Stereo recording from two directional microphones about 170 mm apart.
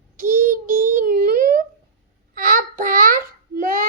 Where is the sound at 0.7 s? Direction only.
55° right (ahead or behind).